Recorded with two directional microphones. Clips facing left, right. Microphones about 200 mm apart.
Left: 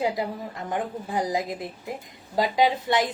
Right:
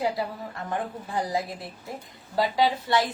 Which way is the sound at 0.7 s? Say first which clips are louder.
Left 2 dB; 15° left (ahead or behind).